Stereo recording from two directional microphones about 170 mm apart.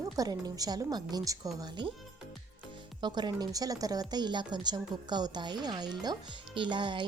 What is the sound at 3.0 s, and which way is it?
A woman's voice, 25° right (ahead or behind).